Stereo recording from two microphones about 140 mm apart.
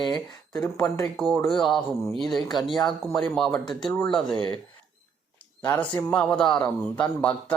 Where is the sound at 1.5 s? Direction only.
Centre (ahead or behind).